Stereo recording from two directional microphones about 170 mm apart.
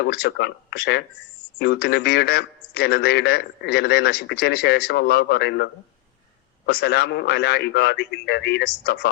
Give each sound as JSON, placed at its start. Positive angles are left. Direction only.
{"t": 0.0, "sound": "a man's voice", "side_deg": 75}
{"t": 6.7, "sound": "a man's voice", "side_deg": 70}